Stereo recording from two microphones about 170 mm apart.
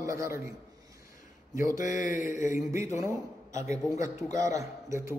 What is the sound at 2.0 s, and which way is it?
Mantra, 50° left (ahead or behind).